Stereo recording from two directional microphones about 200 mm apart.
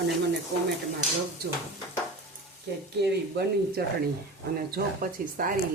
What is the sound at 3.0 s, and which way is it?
Speech, 55° right (ahead or behind).